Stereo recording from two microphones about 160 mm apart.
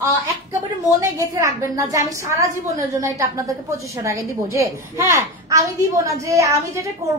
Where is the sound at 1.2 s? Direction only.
20° right (ahead or behind).